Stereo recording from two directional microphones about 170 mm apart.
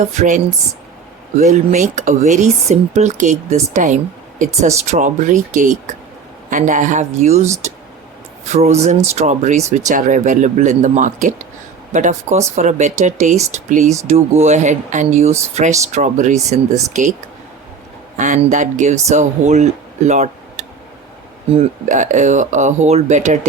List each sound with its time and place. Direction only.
0.0 s speech: 45° right (ahead or behind)
8.4 s speech: 40° right (ahead or behind)
18.2 s speech: 45° right (ahead or behind)